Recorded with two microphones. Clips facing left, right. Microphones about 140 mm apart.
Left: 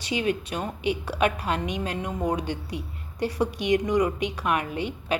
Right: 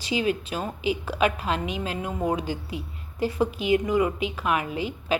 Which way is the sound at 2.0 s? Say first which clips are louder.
Right 2 dB; 10° right (ahead or behind).